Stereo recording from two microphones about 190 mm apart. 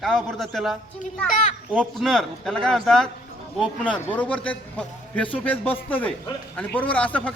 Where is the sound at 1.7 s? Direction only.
5° right (ahead or behind).